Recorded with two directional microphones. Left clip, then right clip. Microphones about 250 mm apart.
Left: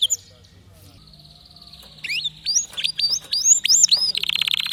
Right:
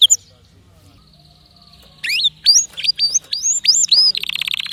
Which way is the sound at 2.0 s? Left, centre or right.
Right.